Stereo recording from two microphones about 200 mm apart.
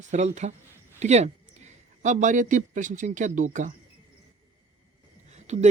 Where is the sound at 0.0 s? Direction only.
35° right (ahead or behind).